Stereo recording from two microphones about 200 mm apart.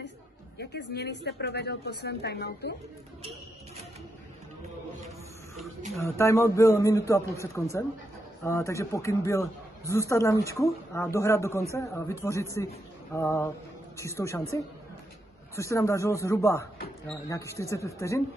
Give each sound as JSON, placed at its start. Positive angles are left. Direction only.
{"t": 0.6, "sound": "speech", "side_deg": 60}
{"t": 5.9, "sound": "speech", "side_deg": 15}
{"t": 15.5, "sound": "speech", "side_deg": 15}